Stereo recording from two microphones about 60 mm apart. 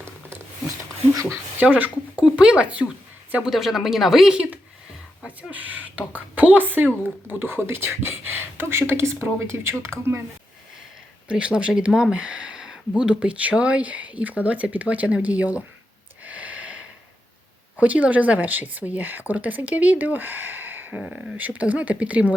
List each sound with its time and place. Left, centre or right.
1.5 s speech: right
3.4 s speech: centre
5.4 s speech: right
11.3 s speech: centre
12.1 s a sound: centre
13.0 s speech: centre
16.2 s a sound: right
17.7 s speech: right